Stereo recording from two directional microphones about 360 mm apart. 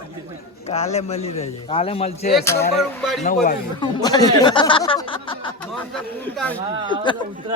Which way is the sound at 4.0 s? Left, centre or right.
Centre.